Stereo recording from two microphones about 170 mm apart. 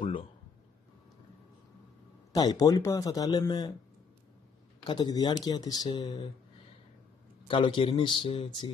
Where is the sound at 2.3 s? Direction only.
20° left (ahead or behind).